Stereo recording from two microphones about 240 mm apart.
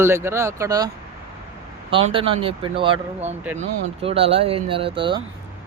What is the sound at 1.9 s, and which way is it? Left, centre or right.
Speech, right.